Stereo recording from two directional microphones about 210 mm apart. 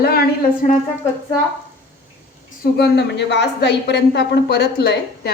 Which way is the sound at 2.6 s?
50° left (ahead or behind).